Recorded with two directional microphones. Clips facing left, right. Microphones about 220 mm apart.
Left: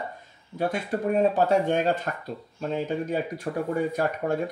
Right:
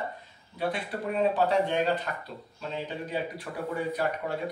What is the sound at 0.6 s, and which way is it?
Speech, 45° left (ahead or behind).